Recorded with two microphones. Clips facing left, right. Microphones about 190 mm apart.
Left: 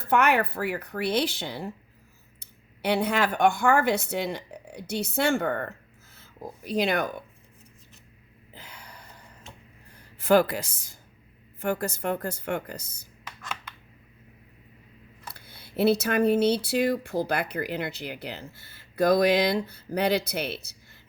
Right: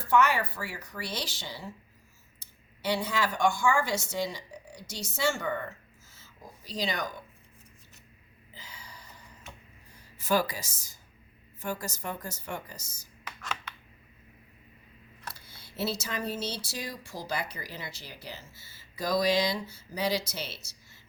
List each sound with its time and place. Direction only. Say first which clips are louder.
0.0 s speech: left 3 dB; 60° left (ahead or behind)
8.5 s gasp: left 3 dB; 60° left (ahead or behind)
10.2 s speech: left 7 dB; 60° left (ahead or behind)
13.4 s a sound: even; 10° left (ahead or behind)
15.4 s speech: left 9 dB; 60° left (ahead or behind)